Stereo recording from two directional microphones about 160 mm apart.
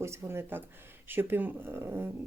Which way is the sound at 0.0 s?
15° right (ahead or behind).